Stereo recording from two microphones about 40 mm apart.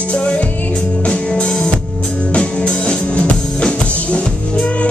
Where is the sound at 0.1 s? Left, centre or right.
Left.